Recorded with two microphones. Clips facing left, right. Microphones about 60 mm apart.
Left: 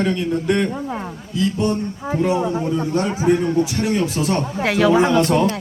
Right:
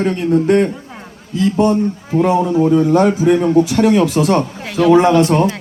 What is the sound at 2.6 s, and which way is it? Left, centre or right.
Speech, right.